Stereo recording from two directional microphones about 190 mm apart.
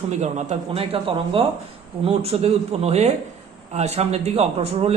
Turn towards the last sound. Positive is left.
turn(degrees=-30)  # may be behind; listen again after turning